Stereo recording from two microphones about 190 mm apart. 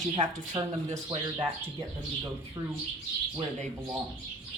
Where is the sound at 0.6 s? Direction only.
20° right (ahead or behind).